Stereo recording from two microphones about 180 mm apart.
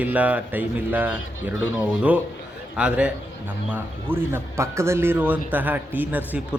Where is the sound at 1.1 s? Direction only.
90° left.